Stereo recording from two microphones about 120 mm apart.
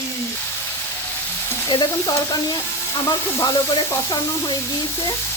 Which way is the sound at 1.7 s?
35° left (ahead or behind).